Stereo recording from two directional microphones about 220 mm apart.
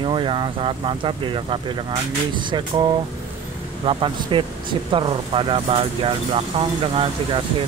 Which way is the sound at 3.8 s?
20° right (ahead or behind).